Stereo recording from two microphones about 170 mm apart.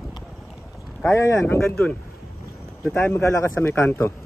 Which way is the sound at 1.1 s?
15° left (ahead or behind).